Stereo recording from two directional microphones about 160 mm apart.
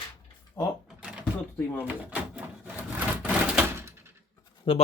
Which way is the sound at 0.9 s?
5° right (ahead or behind).